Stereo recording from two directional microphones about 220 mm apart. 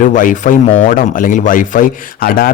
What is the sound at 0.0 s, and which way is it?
Speech, 35° left (ahead or behind).